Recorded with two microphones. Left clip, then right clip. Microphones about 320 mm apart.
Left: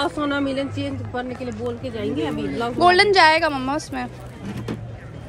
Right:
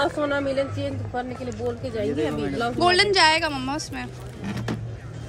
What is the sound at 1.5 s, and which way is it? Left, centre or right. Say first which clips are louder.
Speech: even; centre.